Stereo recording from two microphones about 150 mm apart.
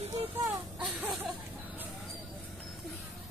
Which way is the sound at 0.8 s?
5° right (ahead or behind).